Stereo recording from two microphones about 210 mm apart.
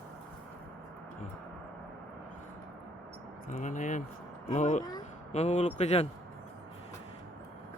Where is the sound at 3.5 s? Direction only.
35° left (ahead or behind).